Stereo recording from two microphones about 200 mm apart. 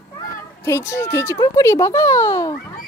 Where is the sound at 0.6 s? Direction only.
15° left (ahead or behind).